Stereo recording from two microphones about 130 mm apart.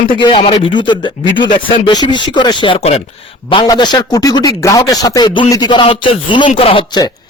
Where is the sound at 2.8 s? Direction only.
55° left (ahead or behind); by 7.3 s 35° left (ahead or behind).